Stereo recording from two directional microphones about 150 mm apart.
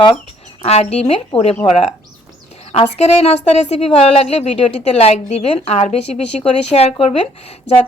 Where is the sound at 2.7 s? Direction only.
45° left (ahead or behind).